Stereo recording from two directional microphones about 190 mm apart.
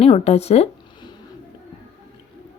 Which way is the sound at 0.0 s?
30° left (ahead or behind).